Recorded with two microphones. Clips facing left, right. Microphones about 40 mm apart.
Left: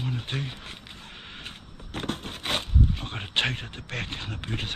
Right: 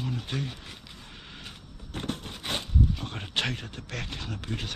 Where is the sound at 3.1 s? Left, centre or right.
Left.